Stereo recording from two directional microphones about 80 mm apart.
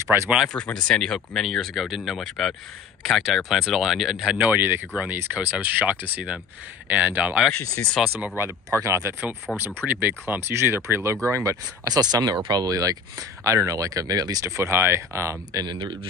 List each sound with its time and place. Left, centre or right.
0.0 s speech: right
0.5 s speech: centre
4.4 s speech: right
8.0 s speech: centre
8.8 s speech: right
9.5 s speech: centre
9.8 s speech: right
11.9 s speech: right
14.4 s speech: right
15.6 s a man's voice: right